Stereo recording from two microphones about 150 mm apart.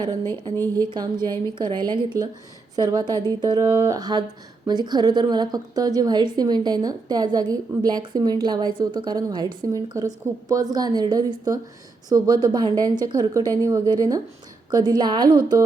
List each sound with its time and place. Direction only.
0.5 s speech: 15° left (ahead or behind)
1.2 s a woman's voice: 30° right (ahead or behind)